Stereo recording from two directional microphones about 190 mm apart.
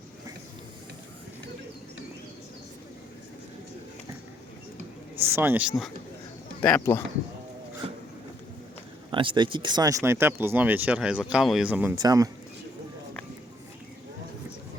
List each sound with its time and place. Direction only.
5.2 s speech: 10° right (ahead or behind)
6.6 s speech: 10° left (ahead or behind)
7.8 s a sound: 30° right (ahead or behind)
9.0 s speech: 25° right (ahead or behind); by 11.9 s 10° right (ahead or behind)
11.9 s speech: 20° right (ahead or behind)